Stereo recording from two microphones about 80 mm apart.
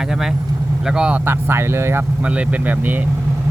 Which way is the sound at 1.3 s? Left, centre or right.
Right.